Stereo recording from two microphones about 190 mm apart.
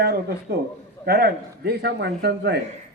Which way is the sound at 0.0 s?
60° right (ahead or behind).